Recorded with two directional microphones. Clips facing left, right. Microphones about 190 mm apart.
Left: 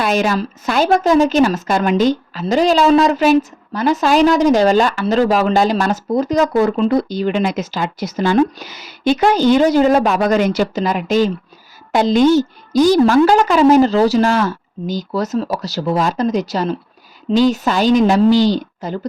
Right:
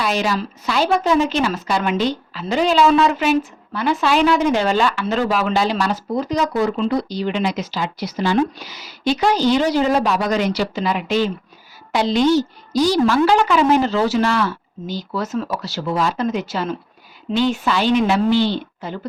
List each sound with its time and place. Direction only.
0.0 s a woman's voice: 50° left (ahead or behind)